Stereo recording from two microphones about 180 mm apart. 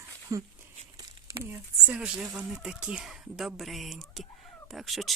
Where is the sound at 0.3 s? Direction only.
20° right (ahead or behind).